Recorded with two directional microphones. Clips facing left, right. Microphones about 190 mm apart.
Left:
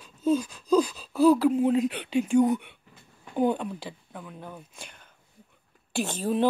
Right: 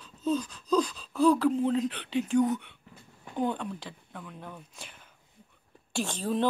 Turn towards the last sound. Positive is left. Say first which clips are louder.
# left 3 dB
turn(degrees=10)  # may be behind; listen again after turning